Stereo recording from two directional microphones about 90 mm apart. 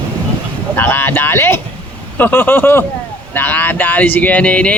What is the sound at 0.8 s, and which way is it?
Speech, 20° left (ahead or behind).